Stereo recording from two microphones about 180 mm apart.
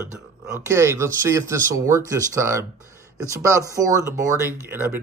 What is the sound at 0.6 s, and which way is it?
Speech, 15° right (ahead or behind).